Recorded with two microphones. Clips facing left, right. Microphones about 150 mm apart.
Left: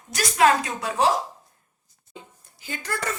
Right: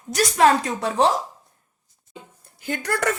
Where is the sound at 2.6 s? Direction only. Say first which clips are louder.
Right 6 dB; 55° right (ahead or behind).